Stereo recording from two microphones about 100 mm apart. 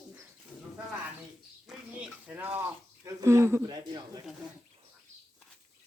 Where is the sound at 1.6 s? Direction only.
10° right (ahead or behind).